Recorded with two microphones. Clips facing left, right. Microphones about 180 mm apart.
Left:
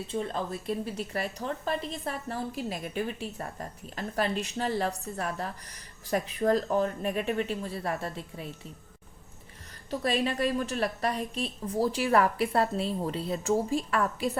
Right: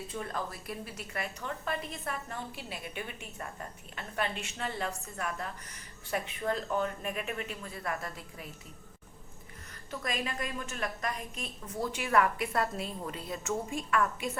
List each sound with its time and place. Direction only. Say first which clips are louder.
0.1 s a woman's voice: left 7 dB; 25° left (ahead or behind)
9.9 s a woman's voice: left 8 dB; 30° left (ahead or behind)